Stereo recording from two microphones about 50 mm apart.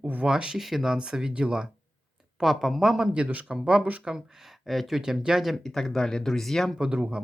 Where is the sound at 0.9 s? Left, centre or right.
Centre.